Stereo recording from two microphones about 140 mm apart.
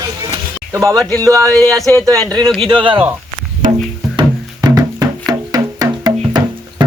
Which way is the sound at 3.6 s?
70° right (ahead or behind).